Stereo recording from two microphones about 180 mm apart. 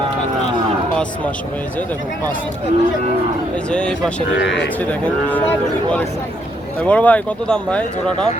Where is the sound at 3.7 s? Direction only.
5° left (ahead or behind).